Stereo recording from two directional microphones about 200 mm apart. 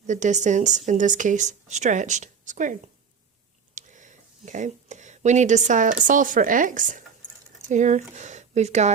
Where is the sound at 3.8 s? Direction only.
40° right (ahead or behind).